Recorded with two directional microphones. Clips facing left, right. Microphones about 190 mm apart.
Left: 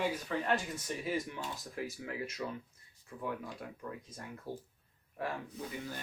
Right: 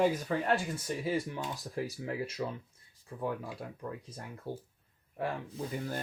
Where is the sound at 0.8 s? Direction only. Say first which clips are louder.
Right 3 dB; 30° right (ahead or behind).